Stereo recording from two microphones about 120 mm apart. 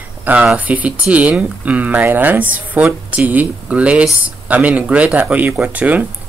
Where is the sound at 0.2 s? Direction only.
10° right (ahead or behind).